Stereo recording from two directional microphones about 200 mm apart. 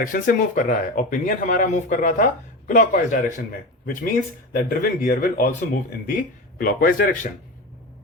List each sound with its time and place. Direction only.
0.0 s speech: 40° left (ahead or behind)
6.6 s speech: 45° left (ahead or behind)